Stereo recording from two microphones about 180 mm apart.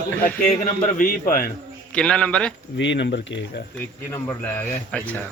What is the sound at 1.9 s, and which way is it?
Speech, 5° left (ahead or behind).